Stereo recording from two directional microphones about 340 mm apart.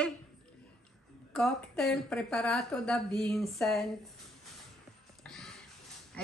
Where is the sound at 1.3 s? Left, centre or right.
Centre.